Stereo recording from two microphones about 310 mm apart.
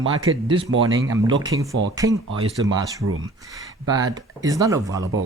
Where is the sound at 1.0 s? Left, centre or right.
Centre.